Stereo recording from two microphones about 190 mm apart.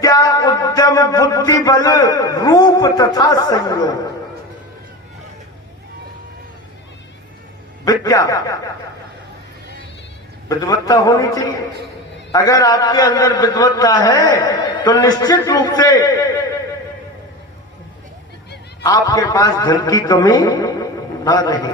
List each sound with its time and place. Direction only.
0.0 s a man's voice: 20° left (ahead or behind)
7.9 s a man's voice: 20° left (ahead or behind)
10.5 s a man's voice: 20° left (ahead or behind)
18.8 s a man's voice: 20° left (ahead or behind)